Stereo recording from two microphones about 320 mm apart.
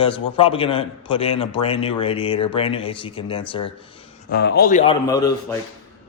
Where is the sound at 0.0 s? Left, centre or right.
Centre.